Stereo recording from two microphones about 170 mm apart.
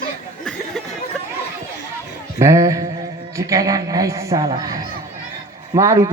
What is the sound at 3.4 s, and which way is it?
A woman's voice, 20° right (ahead or behind).